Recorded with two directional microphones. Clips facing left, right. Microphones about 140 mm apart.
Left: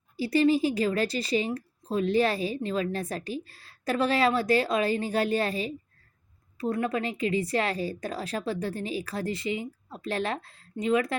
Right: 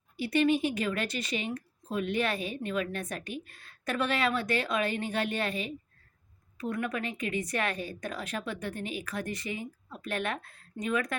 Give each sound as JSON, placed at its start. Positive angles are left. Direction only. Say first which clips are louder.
{"t": 0.2, "sound": "speech", "louder": "left 3 dB", "side_deg": 30}